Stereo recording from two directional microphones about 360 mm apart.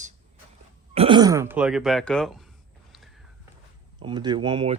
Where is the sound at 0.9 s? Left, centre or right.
Centre.